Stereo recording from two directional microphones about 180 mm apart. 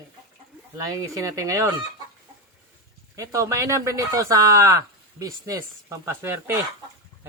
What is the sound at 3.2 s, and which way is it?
Speech, 15° right (ahead or behind).